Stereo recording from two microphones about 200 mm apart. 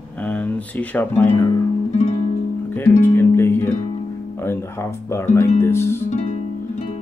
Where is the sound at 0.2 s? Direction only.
5° left (ahead or behind).